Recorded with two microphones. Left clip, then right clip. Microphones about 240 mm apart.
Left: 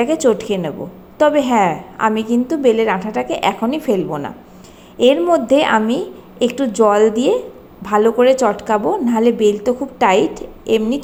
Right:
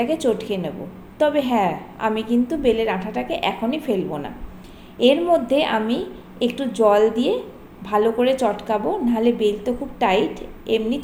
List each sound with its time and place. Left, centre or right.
0.0 s a woman's voice: left